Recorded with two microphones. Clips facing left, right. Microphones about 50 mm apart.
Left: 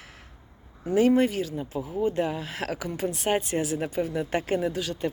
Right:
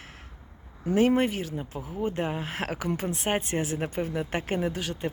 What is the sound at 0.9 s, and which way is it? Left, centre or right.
Speech, right.